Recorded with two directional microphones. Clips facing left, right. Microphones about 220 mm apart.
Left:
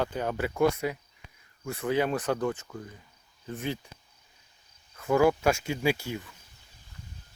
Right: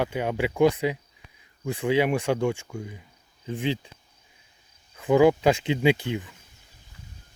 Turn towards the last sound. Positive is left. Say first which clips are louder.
# right 6 dB
turn(degrees=-15)  # may be behind; listen again after turning